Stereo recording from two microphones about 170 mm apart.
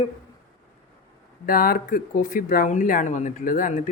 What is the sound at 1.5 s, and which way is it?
Speech, 60° left (ahead or behind).